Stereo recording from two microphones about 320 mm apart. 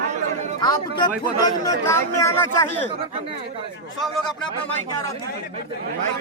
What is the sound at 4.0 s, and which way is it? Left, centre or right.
Speech, centre.